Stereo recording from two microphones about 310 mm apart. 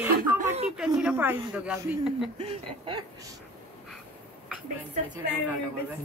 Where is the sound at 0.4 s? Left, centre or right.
Right.